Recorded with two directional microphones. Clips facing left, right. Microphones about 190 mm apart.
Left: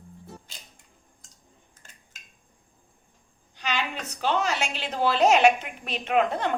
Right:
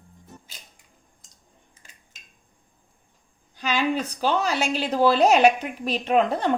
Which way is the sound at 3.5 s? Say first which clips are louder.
Right 4 dB; 40° right (ahead or behind).